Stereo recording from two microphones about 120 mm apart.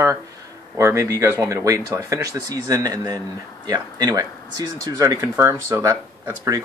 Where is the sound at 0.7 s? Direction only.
25° right (ahead or behind).